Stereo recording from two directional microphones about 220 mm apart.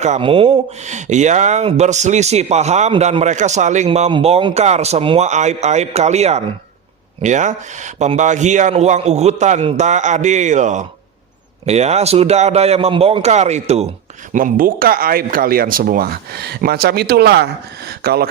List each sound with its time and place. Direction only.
0.0 s a man's voice: 30° right (ahead or behind); by 18.3 s 45° right (ahead or behind)